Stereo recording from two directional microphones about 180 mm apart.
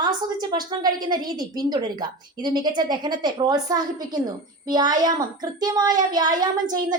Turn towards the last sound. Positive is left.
turn(degrees=-20)  # may be behind; listen again after turning